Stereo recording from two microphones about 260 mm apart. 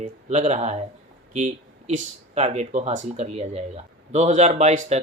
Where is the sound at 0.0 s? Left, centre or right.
Right.